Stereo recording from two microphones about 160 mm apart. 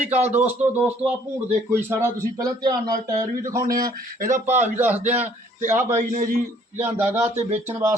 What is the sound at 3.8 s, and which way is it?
Speech, 65° right (ahead or behind).